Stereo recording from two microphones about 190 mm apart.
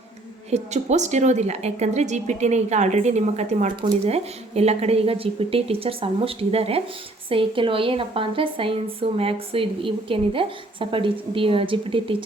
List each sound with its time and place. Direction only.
0.5 s a woman's voice: 35° right (ahead or behind)